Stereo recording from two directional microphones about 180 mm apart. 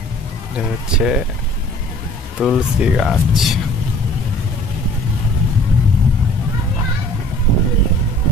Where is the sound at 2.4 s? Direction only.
Centre (ahead or behind).